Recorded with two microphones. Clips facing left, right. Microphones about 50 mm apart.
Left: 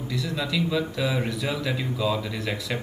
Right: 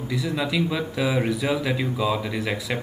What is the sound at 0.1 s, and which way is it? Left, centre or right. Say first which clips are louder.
Speech: right 3 dB; centre.